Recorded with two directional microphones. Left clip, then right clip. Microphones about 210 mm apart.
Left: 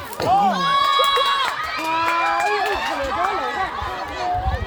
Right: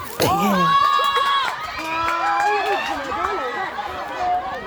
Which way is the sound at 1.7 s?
30° left (ahead or behind).